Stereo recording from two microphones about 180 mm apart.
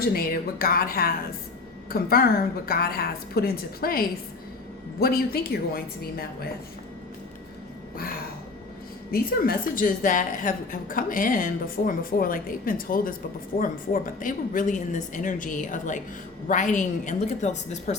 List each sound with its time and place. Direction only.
0.0 s a woman's voice: 55° left (ahead or behind)
9.1 s a woman's voice: 55° left (ahead or behind)